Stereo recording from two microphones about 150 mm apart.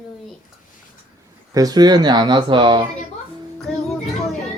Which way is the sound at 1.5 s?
25° right (ahead or behind).